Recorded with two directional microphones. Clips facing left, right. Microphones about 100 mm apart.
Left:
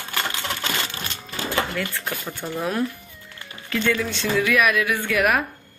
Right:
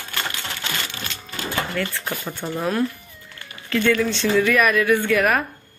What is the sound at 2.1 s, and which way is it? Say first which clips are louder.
Speech: right 2 dB; 5° right (ahead or behind).